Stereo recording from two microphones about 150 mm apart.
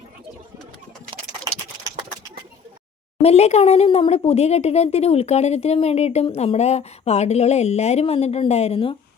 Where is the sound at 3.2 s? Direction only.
45° left (ahead or behind).